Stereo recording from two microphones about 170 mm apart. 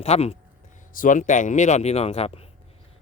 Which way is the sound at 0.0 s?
35° left (ahead or behind).